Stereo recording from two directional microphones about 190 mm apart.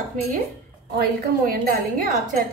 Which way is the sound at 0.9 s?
55° right (ahead or behind).